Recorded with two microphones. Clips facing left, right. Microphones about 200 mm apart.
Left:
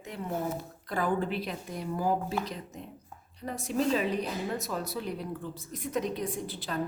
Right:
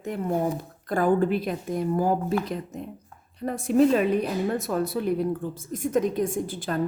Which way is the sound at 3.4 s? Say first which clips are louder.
Right 9 dB; 55° right (ahead or behind).